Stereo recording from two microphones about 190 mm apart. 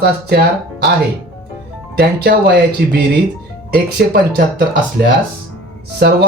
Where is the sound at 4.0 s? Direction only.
55° right (ahead or behind).